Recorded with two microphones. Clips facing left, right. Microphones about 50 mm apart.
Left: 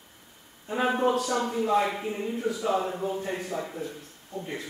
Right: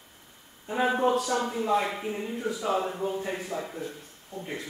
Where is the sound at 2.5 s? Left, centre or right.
Centre.